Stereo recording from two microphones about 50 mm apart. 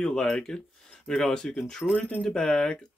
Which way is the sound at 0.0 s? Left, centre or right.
Centre.